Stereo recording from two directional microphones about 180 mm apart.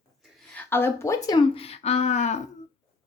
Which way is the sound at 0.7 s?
10° left (ahead or behind).